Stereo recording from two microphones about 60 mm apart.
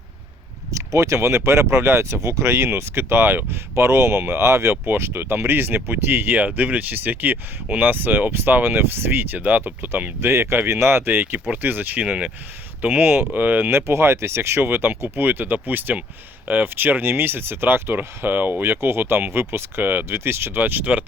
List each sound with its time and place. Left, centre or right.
0.7 s speech: right
12.0 s speech: centre
12.8 s speech: right